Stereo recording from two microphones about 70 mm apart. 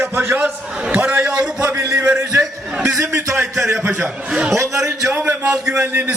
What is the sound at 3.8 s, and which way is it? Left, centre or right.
Speech, centre.